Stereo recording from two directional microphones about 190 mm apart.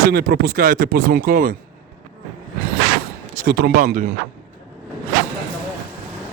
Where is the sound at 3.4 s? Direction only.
55° right (ahead or behind).